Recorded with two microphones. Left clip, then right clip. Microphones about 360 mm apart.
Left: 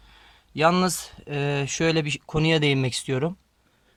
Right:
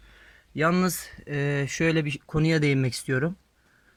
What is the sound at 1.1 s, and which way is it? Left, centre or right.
Speech, left.